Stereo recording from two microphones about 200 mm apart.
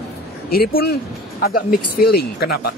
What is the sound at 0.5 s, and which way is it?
Speech, 50° left (ahead or behind).